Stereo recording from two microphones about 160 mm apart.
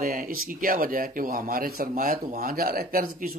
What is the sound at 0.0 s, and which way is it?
Speech, 65° right (ahead or behind).